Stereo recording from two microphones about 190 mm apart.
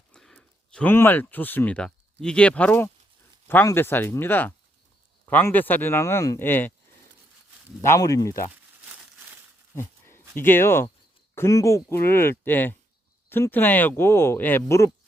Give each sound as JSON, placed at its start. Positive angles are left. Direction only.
{"t": 0.1, "sound": "speech", "side_deg": 5}
{"t": 7.8, "sound": "speech", "side_deg": 15}
{"t": 9.7, "sound": "a sound", "side_deg": 10}
{"t": 11.3, "sound": "speech", "side_deg": 15}